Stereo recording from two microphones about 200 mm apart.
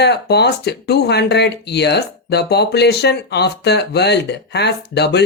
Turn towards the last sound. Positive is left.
turn(degrees=55)  # may be behind; listen again after turning